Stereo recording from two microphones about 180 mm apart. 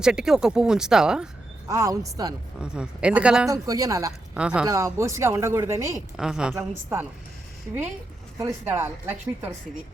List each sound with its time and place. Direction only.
0.0 s speech: 5° right (ahead or behind)
1.6 s speech: 20° right (ahead or behind)
2.6 s speech: 5° right (ahead or behind)
3.5 s speech: 20° right (ahead or behind)
4.4 s speech: 5° right (ahead or behind)
4.6 s speech: 15° right (ahead or behind)
6.1 s speech: 5° right (ahead or behind)
8.4 s speech: 15° right (ahead or behind)